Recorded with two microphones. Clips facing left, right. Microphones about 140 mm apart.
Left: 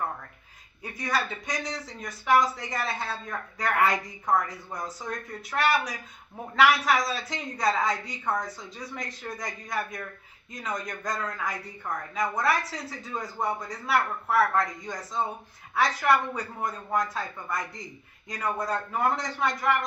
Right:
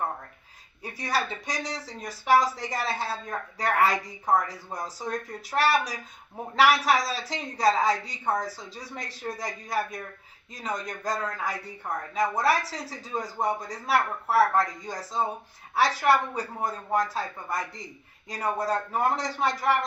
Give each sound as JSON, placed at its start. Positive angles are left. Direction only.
{"t": 0.8, "sound": "speech", "side_deg": -35}